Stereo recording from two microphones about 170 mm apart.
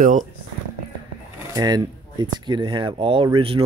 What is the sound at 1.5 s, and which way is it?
Speech, 25° right (ahead or behind).